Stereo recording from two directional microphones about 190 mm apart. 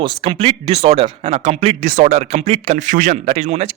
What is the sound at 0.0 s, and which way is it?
A man's voice, 25° right (ahead or behind).